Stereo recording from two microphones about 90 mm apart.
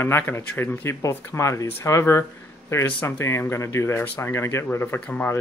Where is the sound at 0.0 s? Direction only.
25° left (ahead or behind).